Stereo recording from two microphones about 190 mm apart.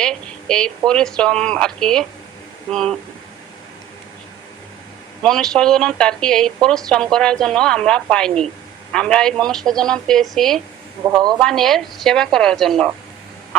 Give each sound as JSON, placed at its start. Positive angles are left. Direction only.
{"t": 0.0, "sound": "a woman's voice", "side_deg": 5}
{"t": 5.2, "sound": "speech", "side_deg": 5}
{"t": 11.0, "sound": "a man's voice", "side_deg": -20}
{"t": 11.3, "sound": "speech", "side_deg": 0}